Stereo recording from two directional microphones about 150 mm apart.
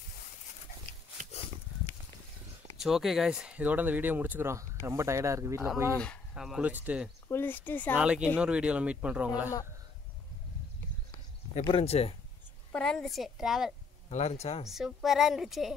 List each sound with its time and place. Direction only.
2.8 s speech: centre (ahead or behind); by 5.7 s 20° right (ahead or behind)
5.9 s speech: centre (ahead or behind)
7.2 s speech: 15° left (ahead or behind)
7.9 s speech: 5° right (ahead or behind)
11.7 s speech: 40° left (ahead or behind)
12.7 s speech: 5° left (ahead or behind)
14.0 s speech: 45° left (ahead or behind)
14.7 s speech: centre (ahead or behind)